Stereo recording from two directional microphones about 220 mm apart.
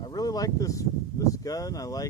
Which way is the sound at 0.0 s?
15° left (ahead or behind).